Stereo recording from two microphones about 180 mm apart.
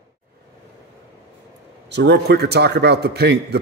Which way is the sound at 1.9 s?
70° right (ahead or behind).